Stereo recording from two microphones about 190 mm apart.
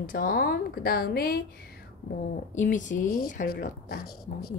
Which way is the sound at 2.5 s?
40° left (ahead or behind).